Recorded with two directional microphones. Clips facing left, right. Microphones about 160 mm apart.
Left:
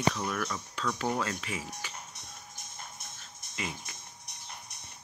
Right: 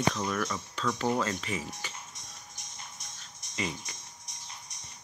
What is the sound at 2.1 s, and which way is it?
Music, 55° left (ahead or behind).